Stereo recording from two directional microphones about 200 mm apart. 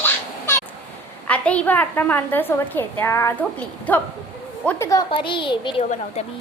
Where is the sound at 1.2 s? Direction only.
5° left (ahead or behind).